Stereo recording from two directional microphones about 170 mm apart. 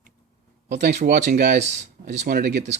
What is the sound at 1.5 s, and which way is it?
Speech, 40° right (ahead or behind).